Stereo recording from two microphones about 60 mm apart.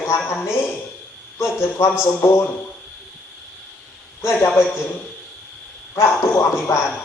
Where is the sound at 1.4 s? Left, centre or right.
Left.